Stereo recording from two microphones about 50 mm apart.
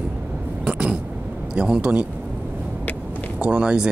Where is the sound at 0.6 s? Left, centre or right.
Right.